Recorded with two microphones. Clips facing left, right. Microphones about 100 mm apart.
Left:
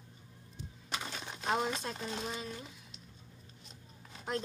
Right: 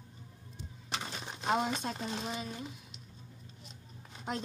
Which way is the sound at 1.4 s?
10° right (ahead or behind).